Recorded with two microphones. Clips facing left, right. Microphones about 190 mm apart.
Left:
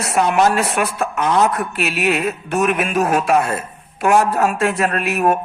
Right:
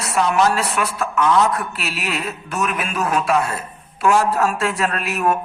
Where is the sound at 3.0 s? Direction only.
40° left (ahead or behind).